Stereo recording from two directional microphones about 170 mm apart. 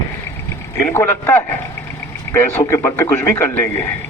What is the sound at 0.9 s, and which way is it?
Speech, 15° left (ahead or behind).